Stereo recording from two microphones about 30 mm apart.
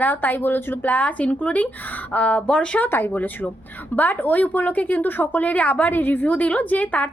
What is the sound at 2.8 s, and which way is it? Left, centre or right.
A woman's voice, left.